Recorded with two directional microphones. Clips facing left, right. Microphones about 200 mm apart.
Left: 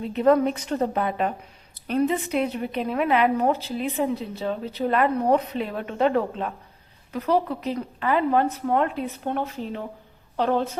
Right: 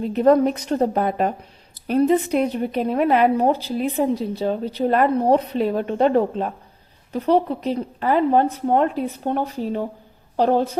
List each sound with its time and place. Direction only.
0.0 s a woman's voice: 40° right (ahead or behind)